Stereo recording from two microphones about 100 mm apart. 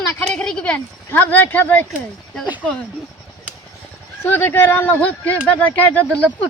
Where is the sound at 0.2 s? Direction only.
10° left (ahead or behind).